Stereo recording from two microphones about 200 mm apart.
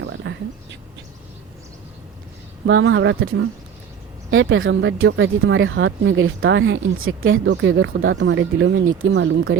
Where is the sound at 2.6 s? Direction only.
70° right (ahead or behind).